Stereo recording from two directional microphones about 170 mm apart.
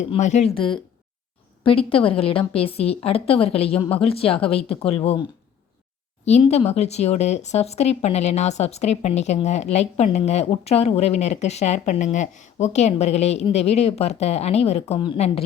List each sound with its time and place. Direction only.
0.0 s speech: 45° left (ahead or behind)
6.2 s speech: 40° left (ahead or behind)